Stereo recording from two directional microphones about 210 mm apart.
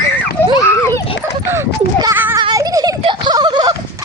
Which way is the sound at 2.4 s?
20° right (ahead or behind).